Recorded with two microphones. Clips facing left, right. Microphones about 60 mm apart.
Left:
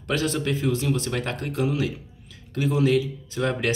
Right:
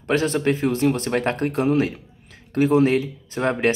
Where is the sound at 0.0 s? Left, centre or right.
Right.